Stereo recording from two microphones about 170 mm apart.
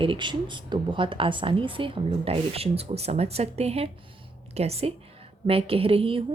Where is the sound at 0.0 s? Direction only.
30° right (ahead or behind).